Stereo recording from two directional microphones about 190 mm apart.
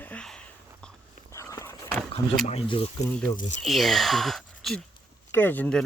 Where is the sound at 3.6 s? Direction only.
Centre (ahead or behind).